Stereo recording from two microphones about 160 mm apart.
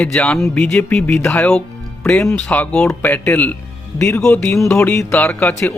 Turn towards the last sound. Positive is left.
turn(degrees=10)  # may be behind; listen again after turning